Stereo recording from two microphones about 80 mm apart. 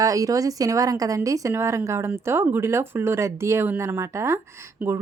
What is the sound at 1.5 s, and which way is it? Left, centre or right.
Speech, right.